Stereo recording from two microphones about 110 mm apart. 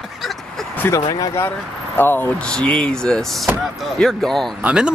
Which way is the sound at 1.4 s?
20° left (ahead or behind).